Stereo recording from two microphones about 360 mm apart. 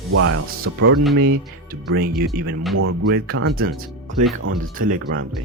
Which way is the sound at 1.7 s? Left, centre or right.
Right.